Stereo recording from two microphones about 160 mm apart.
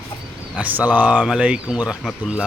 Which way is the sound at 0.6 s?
10° right (ahead or behind).